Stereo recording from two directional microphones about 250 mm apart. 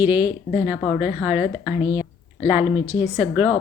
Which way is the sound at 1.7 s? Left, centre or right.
Centre.